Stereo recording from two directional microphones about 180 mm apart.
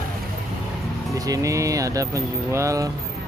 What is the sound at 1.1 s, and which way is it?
Speech, 20° right (ahead or behind).